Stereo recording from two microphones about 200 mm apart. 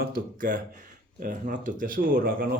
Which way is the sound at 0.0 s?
45° right (ahead or behind).